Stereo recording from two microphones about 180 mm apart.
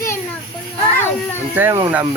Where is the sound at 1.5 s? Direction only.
10° right (ahead or behind).